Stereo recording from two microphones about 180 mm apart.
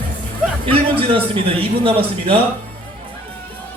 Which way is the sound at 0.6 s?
30° right (ahead or behind).